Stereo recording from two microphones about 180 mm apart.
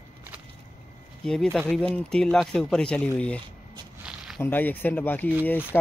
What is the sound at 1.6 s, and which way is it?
Speech, 5° left (ahead or behind).